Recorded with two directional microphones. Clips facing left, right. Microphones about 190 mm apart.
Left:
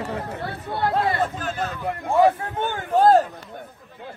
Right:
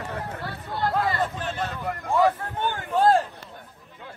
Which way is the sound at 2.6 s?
50° left (ahead or behind).